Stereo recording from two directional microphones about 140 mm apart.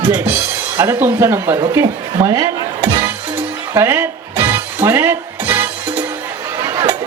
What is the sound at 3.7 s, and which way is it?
Music, 20° right (ahead or behind).